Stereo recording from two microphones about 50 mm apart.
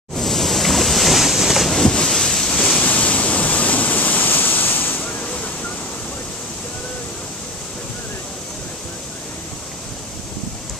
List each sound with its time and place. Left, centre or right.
0.1 s a sound: centre
1.8 s wind noise: centre
2.8 s waterfall: left